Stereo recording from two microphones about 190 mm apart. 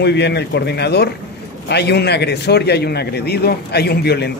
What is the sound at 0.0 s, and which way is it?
A man's voice, 65° left (ahead or behind).